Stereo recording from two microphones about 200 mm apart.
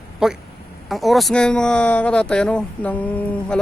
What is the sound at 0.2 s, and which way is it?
Speech, 5° right (ahead or behind).